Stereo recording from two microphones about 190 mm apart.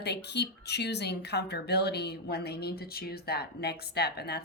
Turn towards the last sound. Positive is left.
turn(degrees=60)  # may be behind; listen again after turning